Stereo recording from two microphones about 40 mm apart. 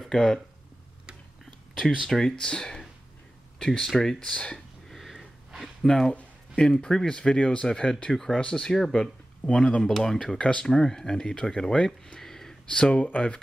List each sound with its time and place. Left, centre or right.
0.0 s speech: centre
2.0 s speech: centre
3.8 s speech: centre
4.3 s speech: left
4.8 s a sound: centre
5.1 s a sound: centre
6.5 s speech: left
8.1 s speech: centre
8.4 s speech: left
8.7 s speech: centre
9.4 s speech: left
12.2 s a sound: centre
12.6 s speech: left